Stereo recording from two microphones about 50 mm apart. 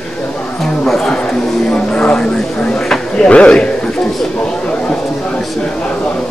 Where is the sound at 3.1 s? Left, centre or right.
Left.